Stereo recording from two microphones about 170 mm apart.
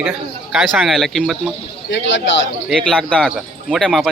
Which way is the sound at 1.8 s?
90° left.